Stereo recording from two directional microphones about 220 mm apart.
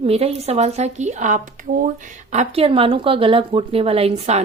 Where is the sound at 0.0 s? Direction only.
25° right (ahead or behind).